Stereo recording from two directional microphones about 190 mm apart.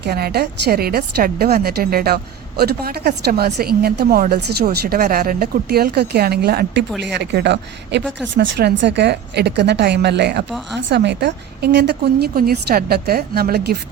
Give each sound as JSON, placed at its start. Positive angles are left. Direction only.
{"t": 0.0, "sound": "a woman's voice", "side_deg": -55}